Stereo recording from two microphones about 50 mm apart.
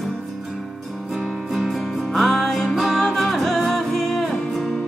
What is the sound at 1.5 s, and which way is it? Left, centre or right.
Music, centre.